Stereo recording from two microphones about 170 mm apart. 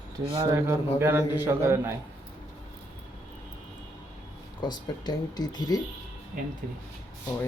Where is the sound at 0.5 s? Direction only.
15° right (ahead or behind).